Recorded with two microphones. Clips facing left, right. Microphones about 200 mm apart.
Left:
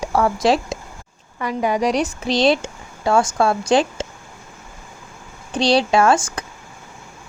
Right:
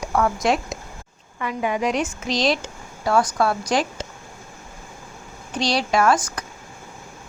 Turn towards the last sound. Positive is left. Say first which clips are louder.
# left 3 dB
turn(degrees=30)  # may be behind; listen again after turning